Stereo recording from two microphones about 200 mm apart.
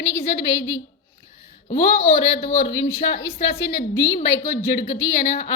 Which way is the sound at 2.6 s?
65° left (ahead or behind).